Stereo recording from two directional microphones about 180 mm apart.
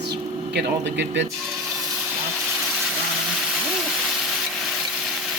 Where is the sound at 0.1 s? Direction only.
70° right (ahead or behind).